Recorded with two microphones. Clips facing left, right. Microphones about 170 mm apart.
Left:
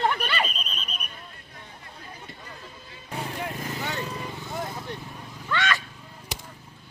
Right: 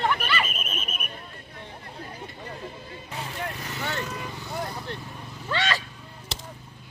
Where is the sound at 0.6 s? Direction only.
50° right (ahead or behind).